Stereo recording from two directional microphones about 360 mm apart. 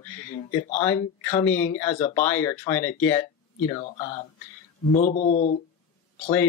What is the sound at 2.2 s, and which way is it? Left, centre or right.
Speech, centre.